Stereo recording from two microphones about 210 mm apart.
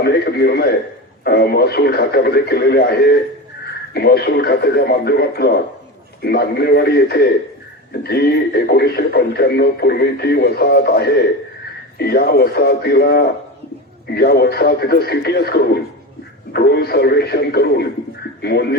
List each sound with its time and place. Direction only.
0.0 s speech: 50° left (ahead or behind)